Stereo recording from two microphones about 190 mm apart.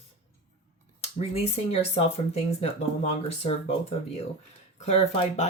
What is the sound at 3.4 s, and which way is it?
Speech, 30° left (ahead or behind).